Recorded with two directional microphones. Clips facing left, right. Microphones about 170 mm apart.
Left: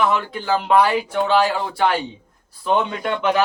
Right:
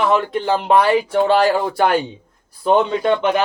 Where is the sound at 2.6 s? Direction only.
30° right (ahead or behind).